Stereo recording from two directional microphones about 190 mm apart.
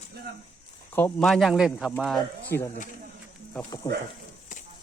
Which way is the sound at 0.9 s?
5° left (ahead or behind).